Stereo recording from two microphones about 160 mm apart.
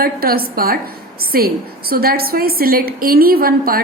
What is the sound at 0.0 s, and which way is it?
A woman's voice, 70° right (ahead or behind).